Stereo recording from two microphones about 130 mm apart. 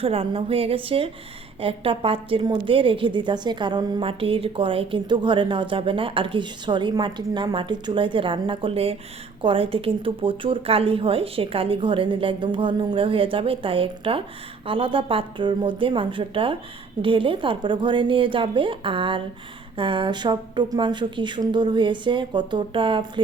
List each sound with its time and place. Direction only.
0.0 s speech: 45° right (ahead or behind)
4.0 s speech: 45° right (ahead or behind)